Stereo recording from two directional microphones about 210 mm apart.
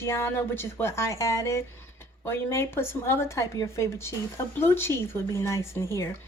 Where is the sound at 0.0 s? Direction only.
10° left (ahead or behind).